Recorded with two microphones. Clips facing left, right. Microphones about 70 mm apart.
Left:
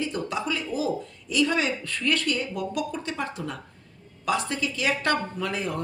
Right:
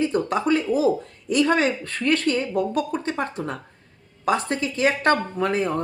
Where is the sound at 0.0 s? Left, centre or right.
Right.